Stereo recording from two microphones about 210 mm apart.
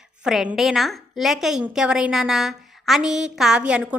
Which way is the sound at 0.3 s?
Centre (ahead or behind).